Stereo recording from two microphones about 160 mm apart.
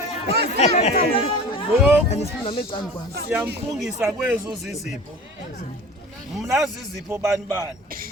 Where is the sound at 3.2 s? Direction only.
10° right (ahead or behind).